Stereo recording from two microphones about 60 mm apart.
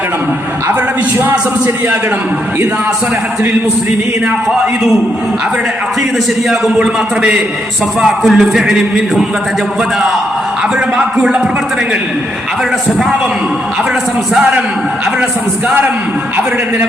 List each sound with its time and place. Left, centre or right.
6.7 s a man's voice: centre
8.0 s a man's voice: centre
10.9 s a man's voice: centre